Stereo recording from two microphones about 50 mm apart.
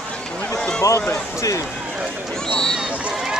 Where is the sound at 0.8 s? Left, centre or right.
Left.